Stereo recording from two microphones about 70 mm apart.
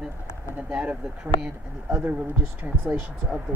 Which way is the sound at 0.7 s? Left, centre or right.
Centre.